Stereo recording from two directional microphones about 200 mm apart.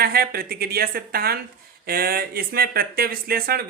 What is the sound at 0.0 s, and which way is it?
Speech, 50° right (ahead or behind).